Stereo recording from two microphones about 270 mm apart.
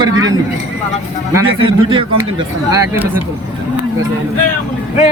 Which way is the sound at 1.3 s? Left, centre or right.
Centre.